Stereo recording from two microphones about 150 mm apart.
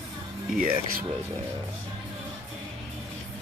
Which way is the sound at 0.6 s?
70° right (ahead or behind).